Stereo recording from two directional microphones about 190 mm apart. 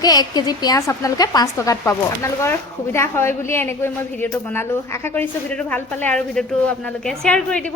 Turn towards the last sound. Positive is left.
turn(degrees=5)  # may be behind; listen again after turning